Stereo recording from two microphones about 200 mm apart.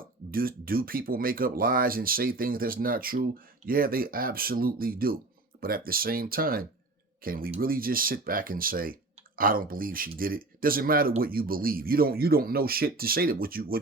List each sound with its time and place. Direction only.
0.3 s speech: 45° right (ahead or behind)